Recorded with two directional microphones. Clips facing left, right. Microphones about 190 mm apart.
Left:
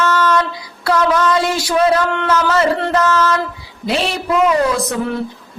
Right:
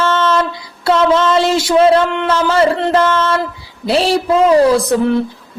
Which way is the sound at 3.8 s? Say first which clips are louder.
Right 5 dB; 35° right (ahead or behind).